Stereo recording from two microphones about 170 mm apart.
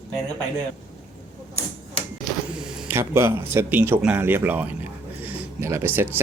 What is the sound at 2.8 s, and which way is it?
Speech, 15° right (ahead or behind).